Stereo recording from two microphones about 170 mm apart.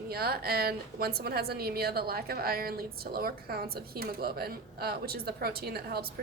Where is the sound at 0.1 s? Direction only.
65° right (ahead or behind).